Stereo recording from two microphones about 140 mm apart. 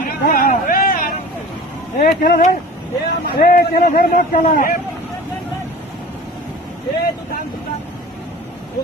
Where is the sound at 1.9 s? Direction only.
75° left (ahead or behind).